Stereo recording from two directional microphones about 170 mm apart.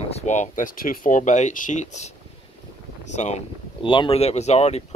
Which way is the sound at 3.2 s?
45° left (ahead or behind).